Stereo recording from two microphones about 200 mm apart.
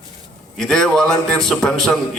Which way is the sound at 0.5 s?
5° left (ahead or behind).